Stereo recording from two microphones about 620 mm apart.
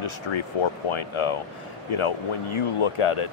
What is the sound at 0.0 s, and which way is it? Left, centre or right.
Speech, left.